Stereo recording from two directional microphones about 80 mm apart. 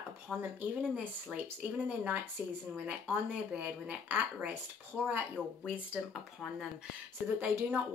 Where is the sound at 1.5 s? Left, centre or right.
Centre.